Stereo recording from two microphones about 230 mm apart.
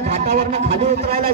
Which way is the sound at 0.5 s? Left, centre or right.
Right.